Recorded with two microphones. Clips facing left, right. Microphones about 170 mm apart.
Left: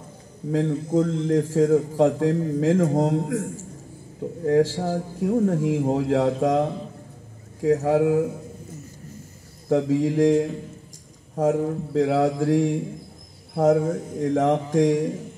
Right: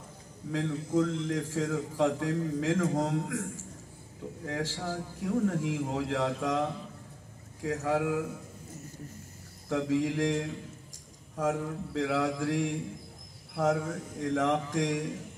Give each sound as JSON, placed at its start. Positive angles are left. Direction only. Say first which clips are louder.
{"t": 0.5, "sound": "a man's voice", "louder": "left 8 dB", "side_deg": 40}
{"t": 4.5, "sound": "a man's voice", "louder": "left 14 dB", "side_deg": 35}
{"t": 9.7, "sound": "a man's voice", "louder": "left 8 dB", "side_deg": 40}